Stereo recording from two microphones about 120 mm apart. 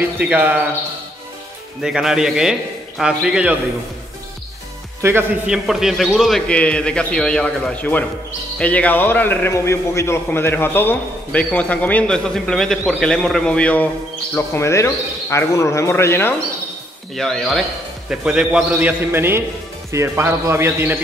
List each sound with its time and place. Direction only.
0.2 s a man's voice: 15° right (ahead or behind)
1.8 s speech: 5° right (ahead or behind)
5.0 s a man's voice: 20° right (ahead or behind)
5.5 s a man's voice: 5° right (ahead or behind)
14.3 s a man's voice: 20° left (ahead or behind)
17.1 s a man's voice: 5° left (ahead or behind); by 21.0 s 15° right (ahead or behind)